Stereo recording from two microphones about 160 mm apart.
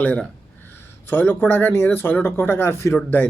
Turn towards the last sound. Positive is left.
turn(degrees=10)  # may be behind; listen again after turning